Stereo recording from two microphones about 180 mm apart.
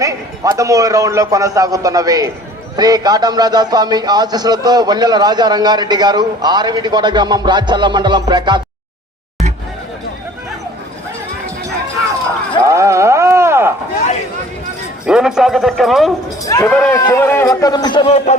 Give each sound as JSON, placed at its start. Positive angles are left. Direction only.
{"t": 0.0, "sound": "a man's voice", "side_deg": -20}
{"t": 12.6, "sound": "a sound", "side_deg": -15}
{"t": 15.0, "sound": "a man's voice", "side_deg": -5}
{"t": 16.4, "sound": "a man's voice", "side_deg": 20}